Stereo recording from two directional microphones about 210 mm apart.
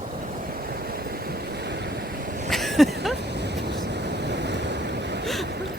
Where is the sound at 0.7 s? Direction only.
45° right (ahead or behind).